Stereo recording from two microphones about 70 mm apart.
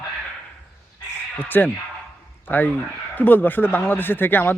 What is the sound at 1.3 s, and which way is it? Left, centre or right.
Speech, left.